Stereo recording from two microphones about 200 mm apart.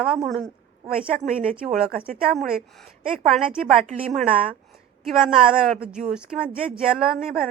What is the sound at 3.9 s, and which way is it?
Speech, 40° right (ahead or behind).